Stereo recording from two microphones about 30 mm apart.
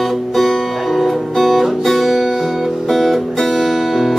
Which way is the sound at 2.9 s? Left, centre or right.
Centre.